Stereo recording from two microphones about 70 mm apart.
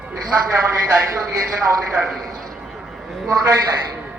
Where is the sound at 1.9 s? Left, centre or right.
Centre.